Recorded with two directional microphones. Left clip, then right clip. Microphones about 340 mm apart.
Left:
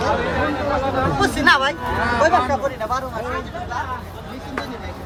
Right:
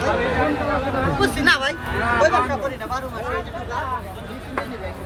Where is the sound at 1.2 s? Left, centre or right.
Left.